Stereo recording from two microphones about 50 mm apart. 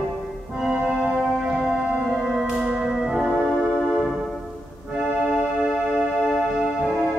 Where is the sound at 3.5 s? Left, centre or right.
Left.